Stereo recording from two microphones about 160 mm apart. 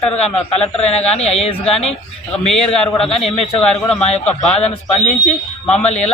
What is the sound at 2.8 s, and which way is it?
Speech, 5° left (ahead or behind).